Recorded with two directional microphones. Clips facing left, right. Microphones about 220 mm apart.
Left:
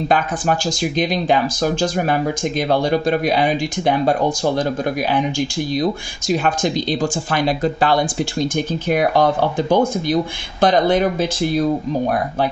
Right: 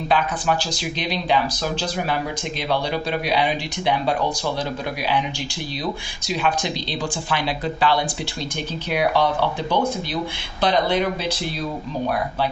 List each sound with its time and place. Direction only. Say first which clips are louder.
0.1 s speech: left 1 dB; 45° left (ahead or behind)